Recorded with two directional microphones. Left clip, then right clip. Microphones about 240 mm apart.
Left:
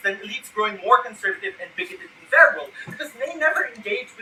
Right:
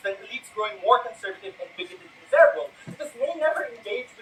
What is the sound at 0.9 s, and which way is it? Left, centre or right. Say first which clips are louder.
Speech: left 2 dB; left.